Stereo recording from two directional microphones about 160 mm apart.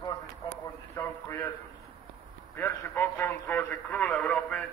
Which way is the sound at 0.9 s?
15° left (ahead or behind).